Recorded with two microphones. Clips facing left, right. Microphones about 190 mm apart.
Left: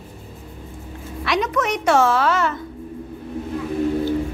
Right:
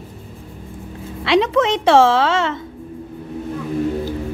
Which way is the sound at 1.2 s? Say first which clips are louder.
Right 6 dB; 30° right (ahead or behind).